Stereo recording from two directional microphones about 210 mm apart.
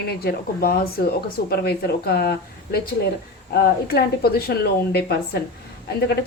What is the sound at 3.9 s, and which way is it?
A woman's voice, 50° left (ahead or behind).